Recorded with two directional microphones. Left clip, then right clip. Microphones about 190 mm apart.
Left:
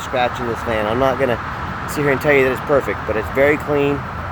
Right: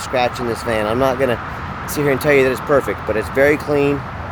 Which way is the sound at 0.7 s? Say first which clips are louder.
Even; 20° right (ahead or behind).